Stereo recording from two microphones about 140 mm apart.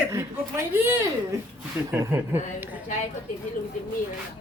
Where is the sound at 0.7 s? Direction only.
15° right (ahead or behind).